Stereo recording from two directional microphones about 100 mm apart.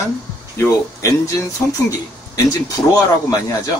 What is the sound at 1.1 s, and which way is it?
Speech, 35° left (ahead or behind).